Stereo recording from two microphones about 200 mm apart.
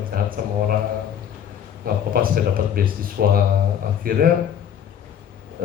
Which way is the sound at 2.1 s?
45° right (ahead or behind).